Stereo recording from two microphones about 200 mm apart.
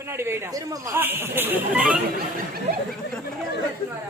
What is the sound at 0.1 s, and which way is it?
Speech, 10° right (ahead or behind).